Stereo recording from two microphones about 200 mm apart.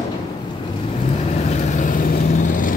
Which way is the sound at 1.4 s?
35° left (ahead or behind).